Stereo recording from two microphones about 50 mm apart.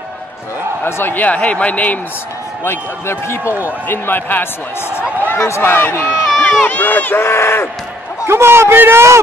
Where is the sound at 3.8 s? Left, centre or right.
Left.